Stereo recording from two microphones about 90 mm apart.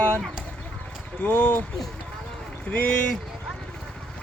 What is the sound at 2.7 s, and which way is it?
Speech, 15° left (ahead or behind).